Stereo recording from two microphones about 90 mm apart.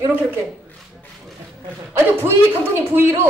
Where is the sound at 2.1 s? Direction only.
25° right (ahead or behind).